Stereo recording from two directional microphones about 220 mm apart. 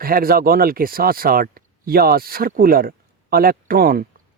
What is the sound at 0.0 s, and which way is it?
Speech, 40° right (ahead or behind).